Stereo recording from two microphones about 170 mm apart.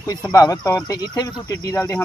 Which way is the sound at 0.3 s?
20° left (ahead or behind).